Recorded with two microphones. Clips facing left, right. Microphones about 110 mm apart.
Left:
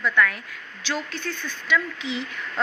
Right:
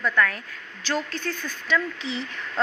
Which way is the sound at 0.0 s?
40° right (ahead or behind).